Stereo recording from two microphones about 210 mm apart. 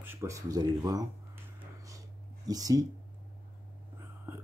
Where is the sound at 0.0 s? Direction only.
10° right (ahead or behind).